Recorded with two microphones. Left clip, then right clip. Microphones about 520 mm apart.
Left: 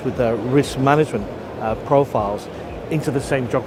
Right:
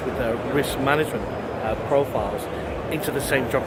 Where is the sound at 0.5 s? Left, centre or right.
Left.